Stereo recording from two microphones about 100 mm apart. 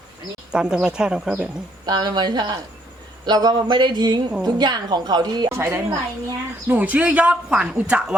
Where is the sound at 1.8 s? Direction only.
45° right (ahead or behind).